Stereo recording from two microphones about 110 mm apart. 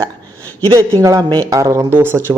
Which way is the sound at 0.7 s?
30° right (ahead or behind).